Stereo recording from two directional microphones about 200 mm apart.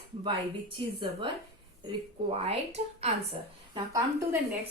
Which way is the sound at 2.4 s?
30° right (ahead or behind).